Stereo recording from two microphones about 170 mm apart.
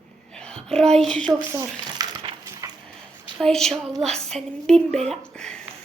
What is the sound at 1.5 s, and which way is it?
Speech, 20° right (ahead or behind).